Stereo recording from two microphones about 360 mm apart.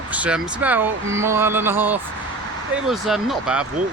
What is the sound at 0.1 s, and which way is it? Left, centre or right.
Speech, centre.